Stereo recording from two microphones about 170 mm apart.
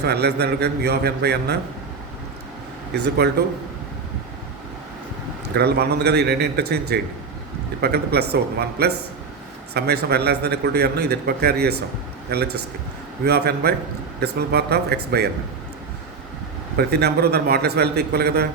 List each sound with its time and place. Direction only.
0.0 s a man's voice: 75° right (ahead or behind)
2.9 s a man's voice: 75° right (ahead or behind)
5.5 s a man's voice: 70° right (ahead or behind)
16.7 s a man's voice: 70° right (ahead or behind)